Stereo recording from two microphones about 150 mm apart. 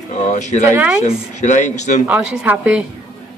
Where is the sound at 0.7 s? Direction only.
10° right (ahead or behind).